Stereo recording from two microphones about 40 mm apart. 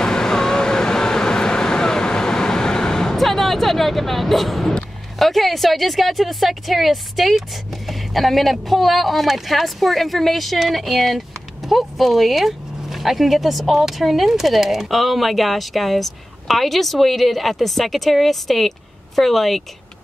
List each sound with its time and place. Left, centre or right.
0.0 s vehicle: centre
3.2 s music: centre
5.2 s a woman's voice: centre